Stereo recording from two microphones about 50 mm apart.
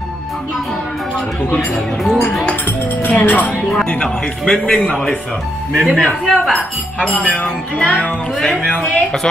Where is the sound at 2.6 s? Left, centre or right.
Left.